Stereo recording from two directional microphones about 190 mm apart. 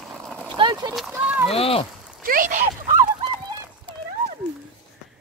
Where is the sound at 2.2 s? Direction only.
45° right (ahead or behind).